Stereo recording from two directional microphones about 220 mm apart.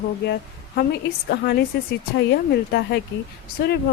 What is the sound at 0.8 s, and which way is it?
A woman's voice, 45° left (ahead or behind).